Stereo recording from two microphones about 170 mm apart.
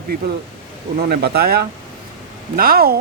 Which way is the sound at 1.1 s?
65° right (ahead or behind).